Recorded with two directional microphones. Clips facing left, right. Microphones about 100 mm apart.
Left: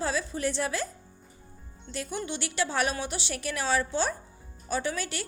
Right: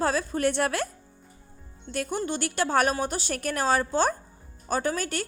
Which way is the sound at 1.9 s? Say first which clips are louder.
Right 5 dB; 50° right (ahead or behind).